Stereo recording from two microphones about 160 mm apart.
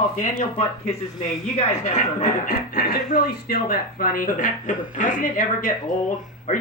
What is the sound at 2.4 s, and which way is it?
Speech, 75° left (ahead or behind).